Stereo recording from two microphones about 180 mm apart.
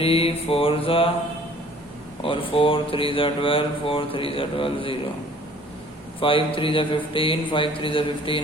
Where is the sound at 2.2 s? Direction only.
30° left (ahead or behind).